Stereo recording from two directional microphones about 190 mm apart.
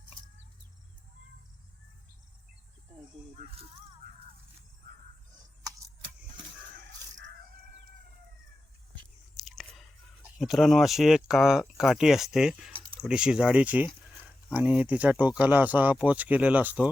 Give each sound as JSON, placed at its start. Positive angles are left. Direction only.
{"t": 3.3, "sound": "speech", "side_deg": -30}
{"t": 9.3, "sound": "chewing", "side_deg": 0}
{"t": 10.3, "sound": "speech", "side_deg": 0}